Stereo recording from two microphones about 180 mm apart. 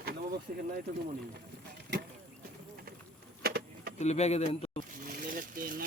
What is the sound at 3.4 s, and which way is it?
Vehicle, 60° right (ahead or behind).